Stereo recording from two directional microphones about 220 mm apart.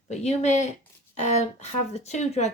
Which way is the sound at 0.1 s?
30° left (ahead or behind).